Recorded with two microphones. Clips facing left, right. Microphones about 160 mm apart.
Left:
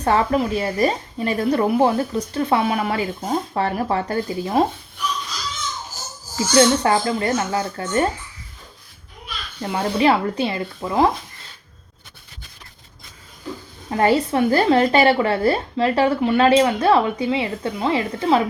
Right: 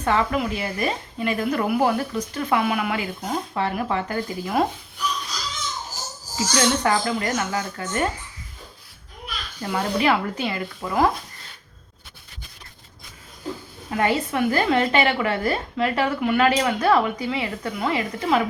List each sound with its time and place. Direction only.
0.0 s speech: 35° left (ahead or behind)
6.5 s speech: 30° left (ahead or behind)
9.6 s speech: 25° left (ahead or behind)
13.9 s speech: 35° left (ahead or behind)